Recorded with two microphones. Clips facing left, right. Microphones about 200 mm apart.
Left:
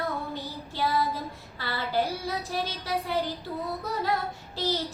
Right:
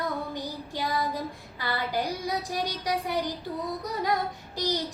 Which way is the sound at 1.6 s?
15° right (ahead or behind).